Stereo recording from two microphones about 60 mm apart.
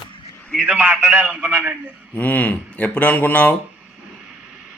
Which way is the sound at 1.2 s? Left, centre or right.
Right.